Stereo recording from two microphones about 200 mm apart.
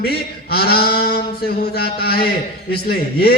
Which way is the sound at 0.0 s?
50° left (ahead or behind).